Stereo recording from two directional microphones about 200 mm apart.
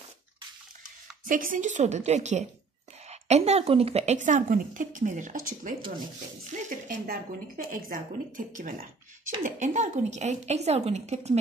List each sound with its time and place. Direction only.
1.2 s a woman's voice: 45° right (ahead or behind)